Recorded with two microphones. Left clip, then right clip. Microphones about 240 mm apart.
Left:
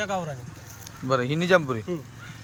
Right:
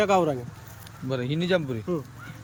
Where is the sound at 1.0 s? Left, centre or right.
Centre.